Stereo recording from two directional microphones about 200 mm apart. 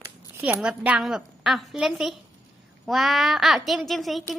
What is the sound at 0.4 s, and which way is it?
A woman's voice, 5° right (ahead or behind).